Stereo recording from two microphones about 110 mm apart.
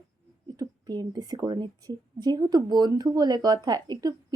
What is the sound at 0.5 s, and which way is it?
Speech, 40° right (ahead or behind).